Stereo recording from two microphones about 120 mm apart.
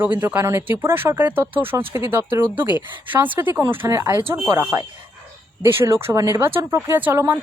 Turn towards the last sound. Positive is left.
turn(degrees=-20)  # may be behind; listen again after turning